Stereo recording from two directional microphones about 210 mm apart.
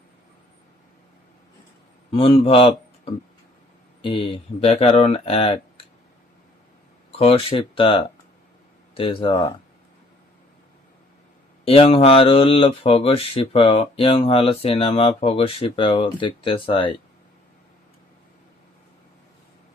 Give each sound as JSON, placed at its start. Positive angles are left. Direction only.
{"t": 2.1, "sound": "speech", "side_deg": 25}
{"t": 7.2, "sound": "speech", "side_deg": 25}
{"t": 11.6, "sound": "speech", "side_deg": 25}